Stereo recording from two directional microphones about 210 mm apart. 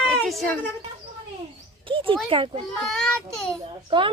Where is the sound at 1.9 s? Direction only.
25° right (ahead or behind).